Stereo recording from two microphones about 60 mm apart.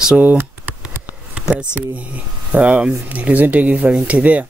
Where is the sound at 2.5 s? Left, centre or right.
Right.